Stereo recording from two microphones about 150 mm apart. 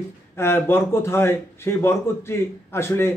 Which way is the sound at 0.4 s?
15° left (ahead or behind).